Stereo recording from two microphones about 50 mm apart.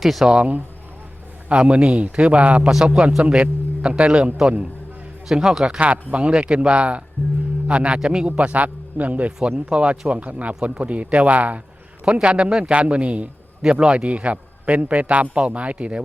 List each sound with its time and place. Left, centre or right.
0.0 s speech: centre
1.5 s a man's voice: right
2.6 s a man's voice: centre
5.3 s a man's voice: centre
5.6 s a man's voice: right
13.6 s a man's voice: centre